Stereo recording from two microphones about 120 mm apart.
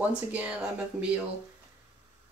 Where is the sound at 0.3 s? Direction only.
10° right (ahead or behind).